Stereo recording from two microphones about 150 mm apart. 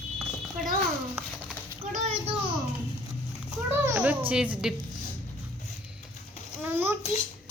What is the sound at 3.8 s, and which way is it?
Speech, 15° right (ahead or behind).